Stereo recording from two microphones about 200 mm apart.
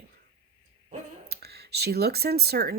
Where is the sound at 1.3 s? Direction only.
55° right (ahead or behind).